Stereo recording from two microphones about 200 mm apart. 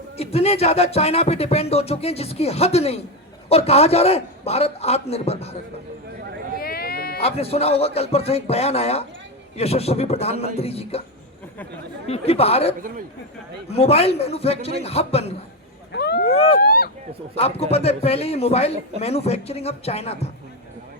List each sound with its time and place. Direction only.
0.2 s speech: 30° left (ahead or behind)
6.6 s sheep: 50° left (ahead or behind)
7.2 s speech: 30° left (ahead or behind)
12.0 s speech: 30° left (ahead or behind)
15.9 s vehicle: 55° left (ahead or behind)
16.3 s speech: 30° left (ahead or behind)
16.6 s speech: 50° left (ahead or behind)
17.3 s speech: 30° left (ahead or behind)